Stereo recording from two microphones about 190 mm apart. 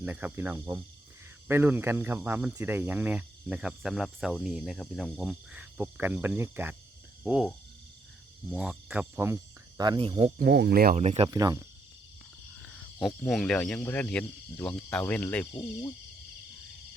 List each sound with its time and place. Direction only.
0.0 s speech: 10° right (ahead or behind)
8.4 s speech: 5° right (ahead or behind); by 10.3 s 30° right (ahead or behind)
10.3 s speech: 55° right (ahead or behind)
10.9 s speech: 35° right (ahead or behind)
11.3 s speech: 20° right (ahead or behind)
12.6 s speech: centre (ahead or behind)